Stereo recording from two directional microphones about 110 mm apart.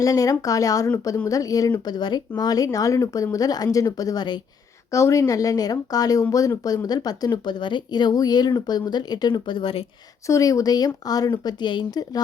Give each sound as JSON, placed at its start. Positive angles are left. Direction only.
{"t": 0.0, "sound": "speech", "side_deg": 30}
{"t": 10.2, "sound": "speech", "side_deg": 30}